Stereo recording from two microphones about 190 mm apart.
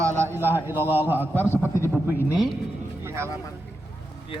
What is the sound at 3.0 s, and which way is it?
Vehicle, 15° right (ahead or behind).